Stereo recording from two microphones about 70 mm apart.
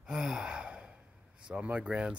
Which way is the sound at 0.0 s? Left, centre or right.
Centre.